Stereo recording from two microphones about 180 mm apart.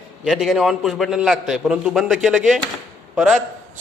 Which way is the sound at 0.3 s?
Centre (ahead or behind).